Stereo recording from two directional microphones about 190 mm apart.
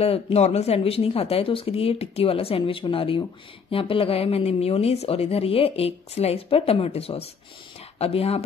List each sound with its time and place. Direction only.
0.0 s speech: 30° left (ahead or behind)